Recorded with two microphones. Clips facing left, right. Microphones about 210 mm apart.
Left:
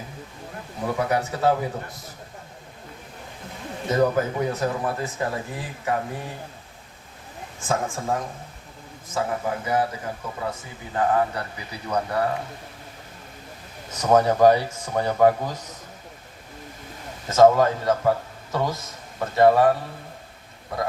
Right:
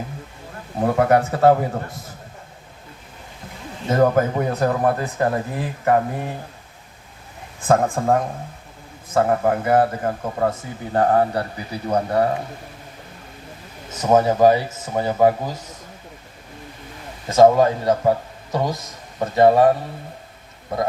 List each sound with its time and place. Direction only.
0.8 s speech: 55° right (ahead or behind)
3.8 s speech: 55° right (ahead or behind)
7.7 s speech: 55° right (ahead or behind); by 12.3 s 30° right (ahead or behind)
13.9 s speech: 5° right (ahead or behind)
17.2 s a man's voice: 15° right (ahead or behind)